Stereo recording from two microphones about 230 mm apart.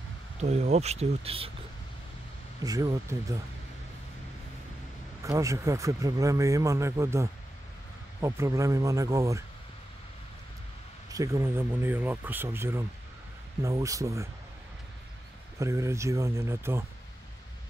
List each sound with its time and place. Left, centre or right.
0.4 s speech: right
2.6 s speech: centre
5.2 s speech: centre
11.1 s speech: centre
15.6 s speech: centre